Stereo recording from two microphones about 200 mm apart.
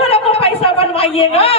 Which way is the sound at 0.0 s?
30° left (ahead or behind).